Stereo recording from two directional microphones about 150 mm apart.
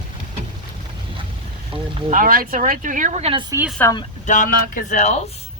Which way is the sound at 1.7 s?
35° right (ahead or behind).